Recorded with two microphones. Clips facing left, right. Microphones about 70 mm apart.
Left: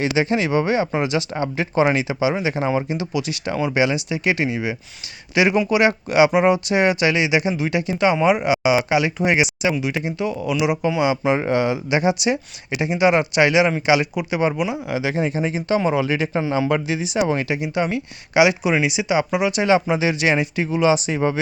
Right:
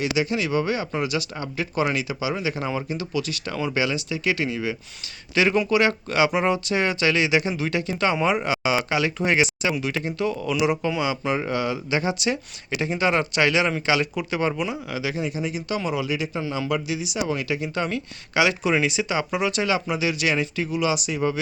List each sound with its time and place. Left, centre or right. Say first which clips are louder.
0.0 s speech: left 4 dB; left; by 11.1 s centre
11.1 s speech: left 6 dB; left
15.1 s speech: left 5 dB; left
17.5 s speech: left 4 dB; centre
19.6 s speech: left 6 dB; left